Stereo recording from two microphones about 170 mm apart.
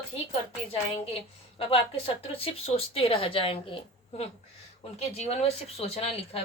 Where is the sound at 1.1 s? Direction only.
35° left (ahead or behind).